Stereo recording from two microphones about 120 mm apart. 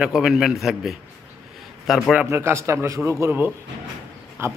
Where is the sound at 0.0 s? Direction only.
5° right (ahead or behind).